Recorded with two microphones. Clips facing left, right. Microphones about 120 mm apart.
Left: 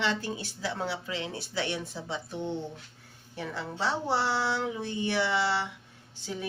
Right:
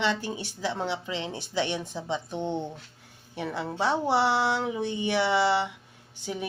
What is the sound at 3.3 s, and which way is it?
Speech, 15° right (ahead or behind).